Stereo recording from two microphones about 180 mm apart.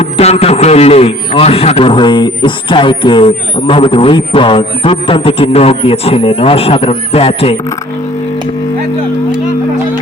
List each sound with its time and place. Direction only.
0.0 s a man's voice: 35° left (ahead or behind)